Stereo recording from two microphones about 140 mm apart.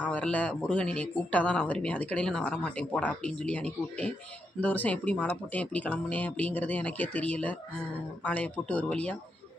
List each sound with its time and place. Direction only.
0.0 s speech: 10° left (ahead or behind)